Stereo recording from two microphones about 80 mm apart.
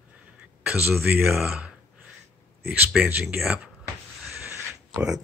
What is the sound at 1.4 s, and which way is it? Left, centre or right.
Speech, centre.